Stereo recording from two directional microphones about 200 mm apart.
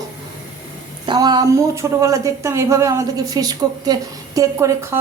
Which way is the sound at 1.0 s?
20° right (ahead or behind).